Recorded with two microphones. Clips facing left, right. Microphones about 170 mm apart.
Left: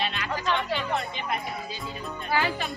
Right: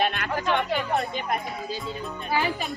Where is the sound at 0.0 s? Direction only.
55° right (ahead or behind).